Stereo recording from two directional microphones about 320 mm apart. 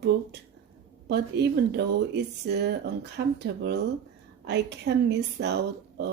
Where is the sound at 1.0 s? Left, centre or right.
Right.